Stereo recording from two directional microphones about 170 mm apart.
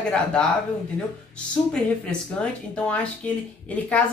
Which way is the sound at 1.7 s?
5° left (ahead or behind).